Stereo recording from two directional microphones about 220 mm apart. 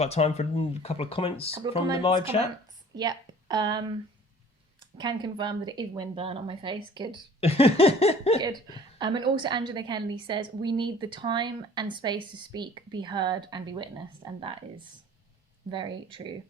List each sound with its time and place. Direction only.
0.0 s speech: 30° left (ahead or behind)
2.9 s speech: 20° right (ahead or behind)
4.9 s a woman's voice: 20° right (ahead or behind)
7.4 s speech: 25° left (ahead or behind)
8.4 s a woman's voice: 20° right (ahead or behind)
15.7 s a woman's voice: 20° right (ahead or behind)